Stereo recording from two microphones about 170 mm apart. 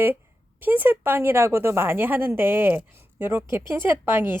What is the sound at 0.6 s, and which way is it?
A woman's voice, 10° right (ahead or behind).